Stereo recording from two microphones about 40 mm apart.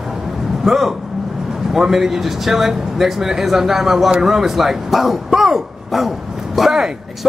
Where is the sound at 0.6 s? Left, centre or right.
Centre.